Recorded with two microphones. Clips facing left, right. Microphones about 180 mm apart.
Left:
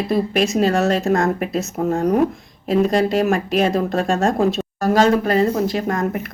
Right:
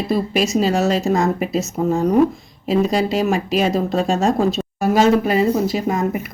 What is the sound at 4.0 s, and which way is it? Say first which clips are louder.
Speech: right 2 dB; 55° left (ahead or behind).